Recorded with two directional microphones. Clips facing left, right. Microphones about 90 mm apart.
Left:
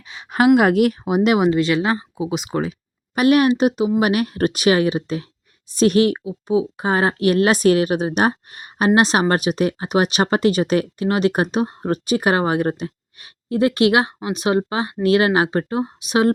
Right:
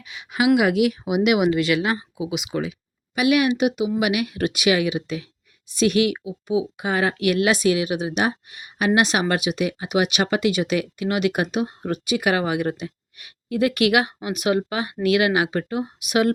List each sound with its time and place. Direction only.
0.1 s speech: 40° left (ahead or behind)